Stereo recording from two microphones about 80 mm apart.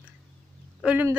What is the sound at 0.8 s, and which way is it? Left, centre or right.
Speech, right.